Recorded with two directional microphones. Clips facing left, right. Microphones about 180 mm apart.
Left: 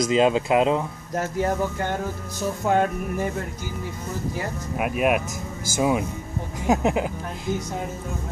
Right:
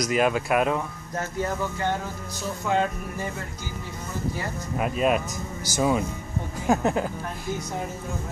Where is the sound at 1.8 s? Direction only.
50° left (ahead or behind).